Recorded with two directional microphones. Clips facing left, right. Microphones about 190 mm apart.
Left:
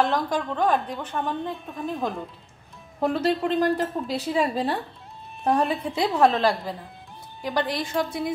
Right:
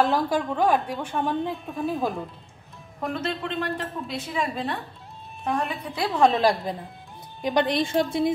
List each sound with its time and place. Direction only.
0.0 s a woman's voice: 5° right (ahead or behind)
1.5 s speech: centre (ahead or behind)
3.0 s a woman's voice: 35° left (ahead or behind)
6.0 s speech: centre (ahead or behind)
6.4 s a woman's voice: 20° right (ahead or behind)